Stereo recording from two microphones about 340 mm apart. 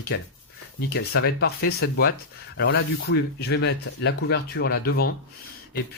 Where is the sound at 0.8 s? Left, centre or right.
Left.